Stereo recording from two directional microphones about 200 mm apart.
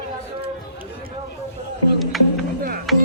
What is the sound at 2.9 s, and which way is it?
Music, centre (ahead or behind).